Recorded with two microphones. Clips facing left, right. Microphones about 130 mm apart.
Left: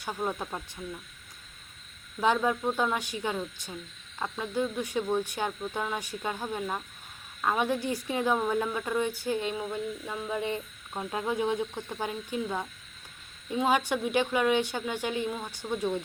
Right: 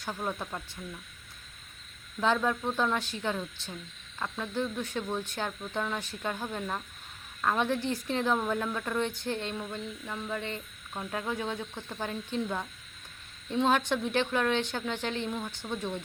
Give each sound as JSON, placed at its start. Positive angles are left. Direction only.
{"t": 0.0, "sound": "a woman's voice", "side_deg": 15}
{"t": 2.2, "sound": "a woman's voice", "side_deg": 15}